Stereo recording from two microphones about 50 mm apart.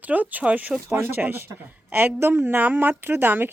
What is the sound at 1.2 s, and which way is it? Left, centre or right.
A woman's voice, right.